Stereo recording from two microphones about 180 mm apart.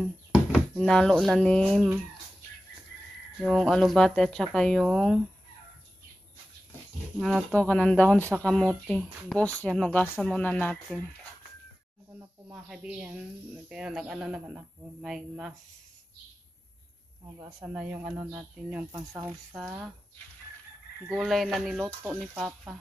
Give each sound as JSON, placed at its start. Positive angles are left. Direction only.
{"t": 0.5, "sound": "speech", "side_deg": 5}
{"t": 3.4, "sound": "speech", "side_deg": 0}
{"t": 7.2, "sound": "speech", "side_deg": 0}
{"t": 12.5, "sound": "speech", "side_deg": -5}
{"t": 17.4, "sound": "speech", "side_deg": -20}
{"t": 18.9, "sound": "speech", "side_deg": -20}
{"t": 19.5, "sound": "speech", "side_deg": 0}
{"t": 21.1, "sound": "speech", "side_deg": 0}